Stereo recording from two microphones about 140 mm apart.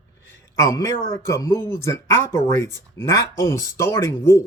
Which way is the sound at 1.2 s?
20° left (ahead or behind).